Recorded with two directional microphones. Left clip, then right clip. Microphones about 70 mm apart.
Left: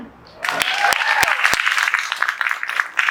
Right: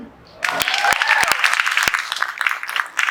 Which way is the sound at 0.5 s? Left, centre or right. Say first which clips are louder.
Left 1 dB; right.